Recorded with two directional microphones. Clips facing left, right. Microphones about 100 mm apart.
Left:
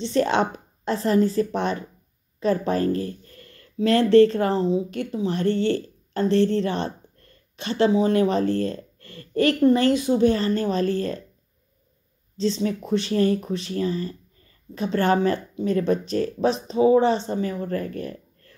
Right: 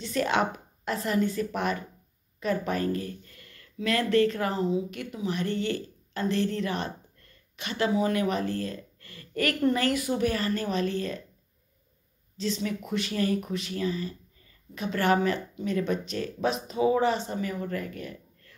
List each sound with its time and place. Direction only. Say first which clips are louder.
0.0 s speech: left 5 dB; 30° left (ahead or behind)
12.4 s speech: left 6 dB; 30° left (ahead or behind)